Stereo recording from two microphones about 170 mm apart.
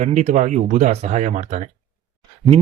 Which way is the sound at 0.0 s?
45° right (ahead or behind).